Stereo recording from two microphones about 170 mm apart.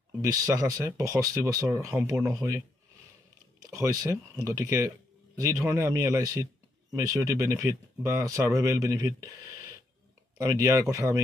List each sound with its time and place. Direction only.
0.2 s speech: 20° right (ahead or behind)
3.5 s speech: 20° right (ahead or behind)
10.4 s speech: 20° right (ahead or behind)